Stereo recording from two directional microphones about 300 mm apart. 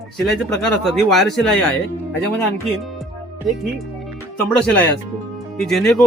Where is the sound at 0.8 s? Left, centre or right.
Centre.